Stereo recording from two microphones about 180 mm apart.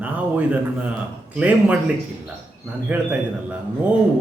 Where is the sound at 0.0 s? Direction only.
10° right (ahead or behind).